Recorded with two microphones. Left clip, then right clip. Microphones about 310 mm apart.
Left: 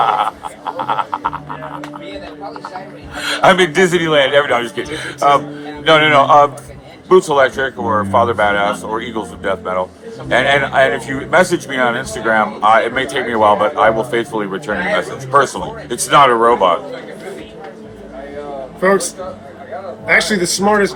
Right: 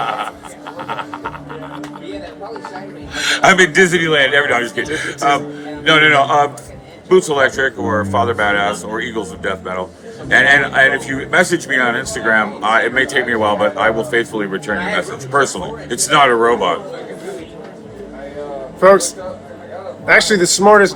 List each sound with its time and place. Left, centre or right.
0.0 s frog: centre
3.2 s a man's voice: centre
18.8 s a man's voice: centre